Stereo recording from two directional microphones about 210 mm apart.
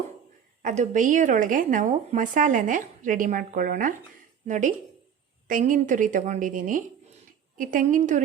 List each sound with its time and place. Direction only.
0.6 s a woman's voice: 35° right (ahead or behind)